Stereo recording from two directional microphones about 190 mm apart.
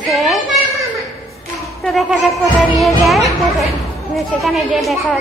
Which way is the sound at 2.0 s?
Centre (ahead or behind).